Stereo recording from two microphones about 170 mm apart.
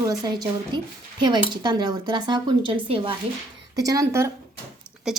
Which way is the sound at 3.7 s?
20° right (ahead or behind).